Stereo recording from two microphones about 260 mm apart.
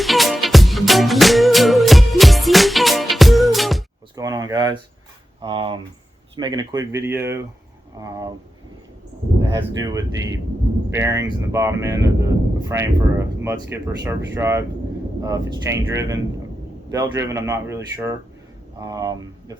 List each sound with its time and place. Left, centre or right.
0.0 s music: centre
4.1 s a sound: centre
5.4 s speech: centre
9.5 s speech: centre